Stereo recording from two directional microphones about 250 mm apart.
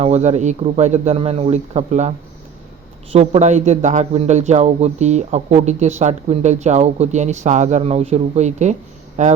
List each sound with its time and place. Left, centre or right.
0.0 s a man's voice: right